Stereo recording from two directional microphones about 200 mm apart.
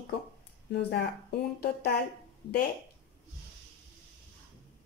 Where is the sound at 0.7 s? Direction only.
55° left (ahead or behind).